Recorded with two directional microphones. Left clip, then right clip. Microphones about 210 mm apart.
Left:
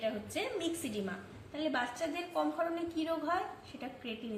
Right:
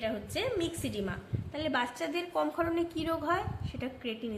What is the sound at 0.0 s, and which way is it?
A woman's voice, 55° right (ahead or behind).